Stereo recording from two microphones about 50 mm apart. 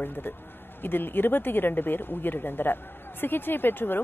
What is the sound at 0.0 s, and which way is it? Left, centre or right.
A woman's voice, left.